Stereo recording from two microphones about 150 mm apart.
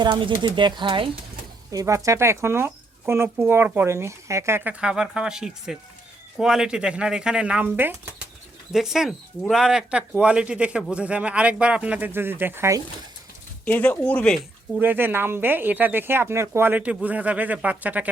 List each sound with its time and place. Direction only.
0.0 s speech: 30° right (ahead or behind)
1.7 s speech: 20° right (ahead or behind)
8.7 s speech: centre (ahead or behind)
13.7 s speech: 15° left (ahead or behind)
14.8 s speech: 15° right (ahead or behind)